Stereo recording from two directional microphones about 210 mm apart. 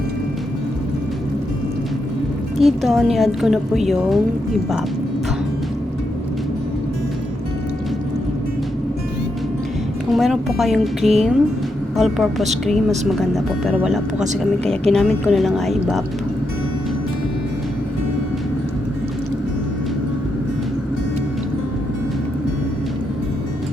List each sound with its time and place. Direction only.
2.6 s speech: centre (ahead or behind)
10.1 s speech: centre (ahead or behind)